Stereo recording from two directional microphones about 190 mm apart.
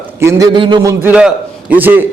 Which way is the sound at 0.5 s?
25° right (ahead or behind).